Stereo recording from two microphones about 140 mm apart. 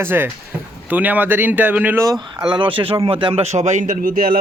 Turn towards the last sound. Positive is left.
turn(degrees=-85)